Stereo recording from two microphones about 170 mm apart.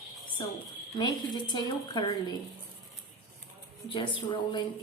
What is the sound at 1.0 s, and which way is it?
Speech, 25° left (ahead or behind).